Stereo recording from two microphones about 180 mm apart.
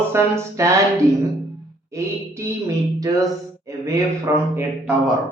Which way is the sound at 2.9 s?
20° right (ahead or behind).